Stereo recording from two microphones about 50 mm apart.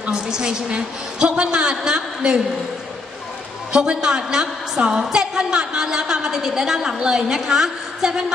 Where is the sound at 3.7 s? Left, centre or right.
Centre.